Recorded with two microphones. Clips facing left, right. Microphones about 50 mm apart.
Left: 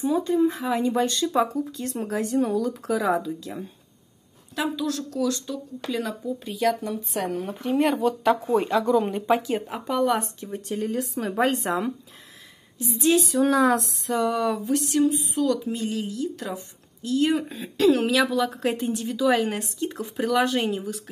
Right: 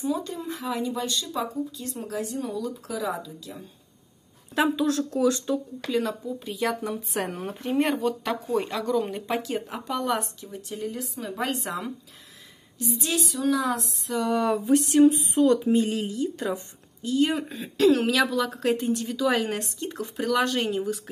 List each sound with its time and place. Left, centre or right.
0.1 s speech: left
4.6 s a woman's voice: right
5.9 s speech: centre
10.4 s speech: left
12.7 s speech: left
13.3 s speech: left
13.7 s a sound: left
14.3 s speech: centre
15.0 s speech: right
17.0 s speech: centre